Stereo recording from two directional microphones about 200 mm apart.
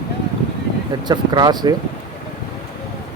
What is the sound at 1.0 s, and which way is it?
Speech, 20° right (ahead or behind).